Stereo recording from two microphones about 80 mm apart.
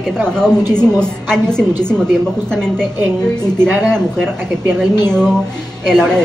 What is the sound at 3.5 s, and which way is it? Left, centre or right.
Speech, right.